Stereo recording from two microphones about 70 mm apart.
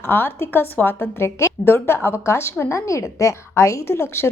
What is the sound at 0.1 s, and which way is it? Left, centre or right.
A woman's voice, left.